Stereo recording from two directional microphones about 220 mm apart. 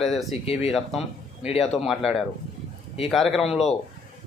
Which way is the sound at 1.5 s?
25° left (ahead or behind).